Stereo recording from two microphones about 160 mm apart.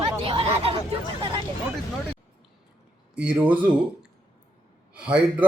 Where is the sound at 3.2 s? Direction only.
10° right (ahead or behind).